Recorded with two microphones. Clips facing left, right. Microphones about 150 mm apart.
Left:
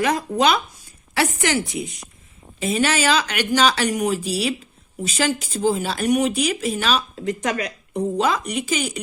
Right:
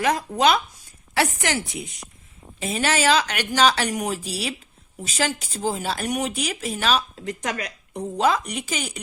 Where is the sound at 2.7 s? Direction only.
35° right (ahead or behind).